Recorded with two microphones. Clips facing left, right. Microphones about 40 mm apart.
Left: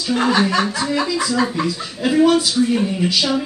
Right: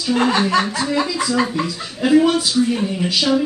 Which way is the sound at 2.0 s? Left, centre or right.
Centre.